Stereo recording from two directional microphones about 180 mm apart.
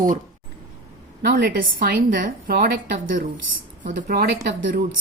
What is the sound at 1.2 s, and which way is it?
A woman's voice, 60° right (ahead or behind).